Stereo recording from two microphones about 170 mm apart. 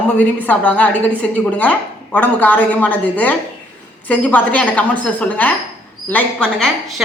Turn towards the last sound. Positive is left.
turn(degrees=5)  # may be behind; listen again after turning